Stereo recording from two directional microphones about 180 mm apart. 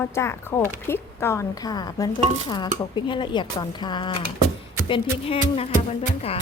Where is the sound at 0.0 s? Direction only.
15° left (ahead or behind); by 6.3 s 35° left (ahead or behind).